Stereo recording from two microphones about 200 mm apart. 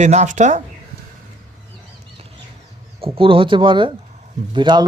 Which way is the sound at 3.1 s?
25° right (ahead or behind).